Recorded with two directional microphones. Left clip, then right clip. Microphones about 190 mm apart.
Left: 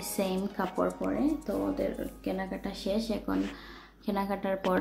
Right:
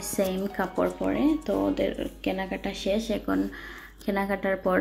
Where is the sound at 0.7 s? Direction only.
20° right (ahead or behind).